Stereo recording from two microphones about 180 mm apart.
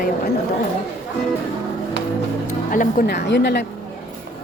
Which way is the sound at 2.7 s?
50° left (ahead or behind).